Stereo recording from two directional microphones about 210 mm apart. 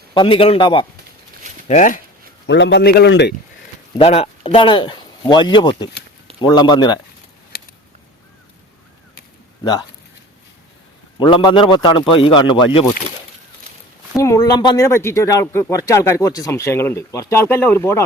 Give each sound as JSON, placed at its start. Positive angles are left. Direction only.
{"t": 0.1, "sound": "a man's voice", "side_deg": 25}
{"t": 1.6, "sound": "speech", "side_deg": 35}
{"t": 2.5, "sound": "a man's voice", "side_deg": 60}
{"t": 3.9, "sound": "a man's voice", "side_deg": 30}
{"t": 11.2, "sound": "a man's voice", "side_deg": 20}
{"t": 14.2, "sound": "speech", "side_deg": 15}